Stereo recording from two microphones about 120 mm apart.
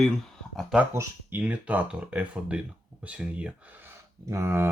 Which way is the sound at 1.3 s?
10° right (ahead or behind).